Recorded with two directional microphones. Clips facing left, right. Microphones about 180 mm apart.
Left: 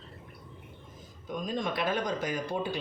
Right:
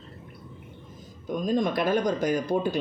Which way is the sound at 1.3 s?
45° right (ahead or behind).